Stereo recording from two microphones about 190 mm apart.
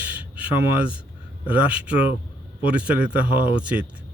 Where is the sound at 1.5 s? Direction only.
5° right (ahead or behind).